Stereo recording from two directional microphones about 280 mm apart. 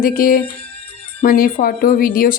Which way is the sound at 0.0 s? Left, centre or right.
Left.